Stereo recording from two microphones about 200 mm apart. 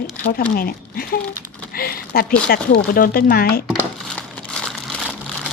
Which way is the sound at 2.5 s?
50° left (ahead or behind).